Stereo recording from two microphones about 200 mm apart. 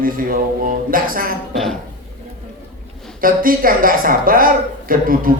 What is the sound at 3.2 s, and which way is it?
Speech, 45° right (ahead or behind).